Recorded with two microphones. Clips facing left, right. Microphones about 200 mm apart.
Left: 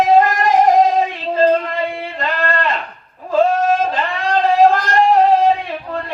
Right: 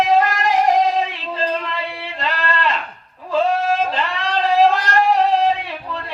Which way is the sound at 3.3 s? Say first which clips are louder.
Left 4 dB; 50° left (ahead or behind).